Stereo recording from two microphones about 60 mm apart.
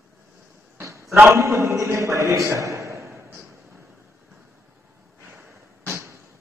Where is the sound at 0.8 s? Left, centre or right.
Right.